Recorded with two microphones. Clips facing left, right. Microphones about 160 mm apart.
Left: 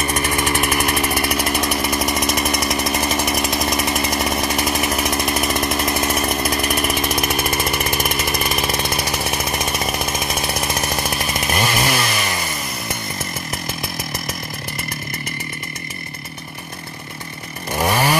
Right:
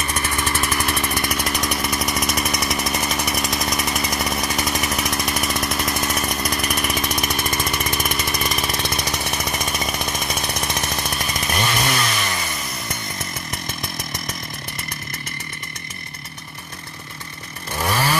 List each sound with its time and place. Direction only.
0.4 s vehicle: 15° left (ahead or behind)
1.1 s chainsaw: 5° left (ahead or behind)
8.9 s jackhammer: 5° left (ahead or behind)
11.6 s chainsaw: 5° left (ahead or behind)
17.7 s chainsaw: 15° left (ahead or behind)